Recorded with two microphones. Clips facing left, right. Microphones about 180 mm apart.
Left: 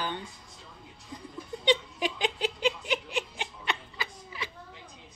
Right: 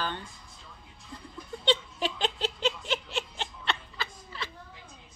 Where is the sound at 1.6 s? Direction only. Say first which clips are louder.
Left 1 dB; 15° left (ahead or behind).